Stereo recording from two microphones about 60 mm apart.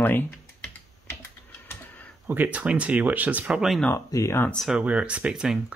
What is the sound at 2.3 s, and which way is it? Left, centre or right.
Speech, right.